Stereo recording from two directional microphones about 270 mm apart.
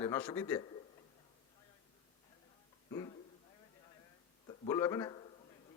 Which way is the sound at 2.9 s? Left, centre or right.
Centre.